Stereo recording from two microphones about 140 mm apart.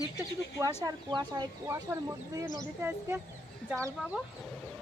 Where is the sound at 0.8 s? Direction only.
30° right (ahead or behind); by 3.2 s 15° right (ahead or behind).